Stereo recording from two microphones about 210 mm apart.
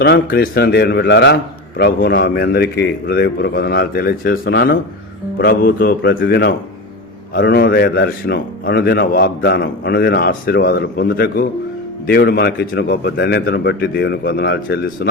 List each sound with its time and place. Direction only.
0.3 s a man's voice: 45° left (ahead or behind)